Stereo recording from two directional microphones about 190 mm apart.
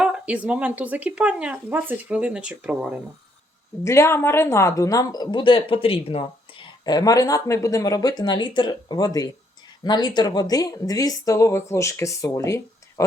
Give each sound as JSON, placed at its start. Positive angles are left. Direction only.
{"t": 0.0, "sound": "speech", "side_deg": -5}
{"t": 3.8, "sound": "speech", "side_deg": 15}